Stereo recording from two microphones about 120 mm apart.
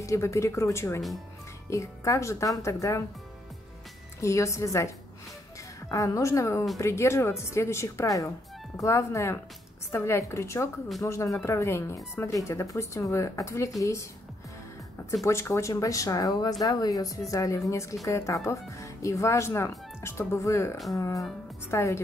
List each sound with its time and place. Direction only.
0.0 s speech: 25° left (ahead or behind)
4.2 s speech: 25° left (ahead or behind)
15.2 s speech: 20° left (ahead or behind)